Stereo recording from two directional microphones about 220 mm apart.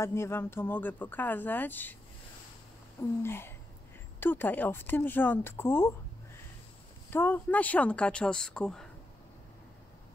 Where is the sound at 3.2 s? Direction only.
10° left (ahead or behind).